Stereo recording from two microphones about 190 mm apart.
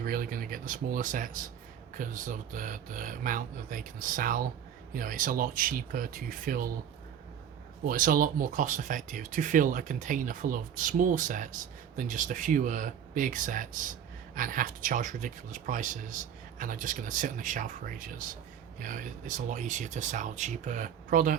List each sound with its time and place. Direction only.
0.0 s speech: 45° right (ahead or behind)
7.9 s speech: 45° right (ahead or behind)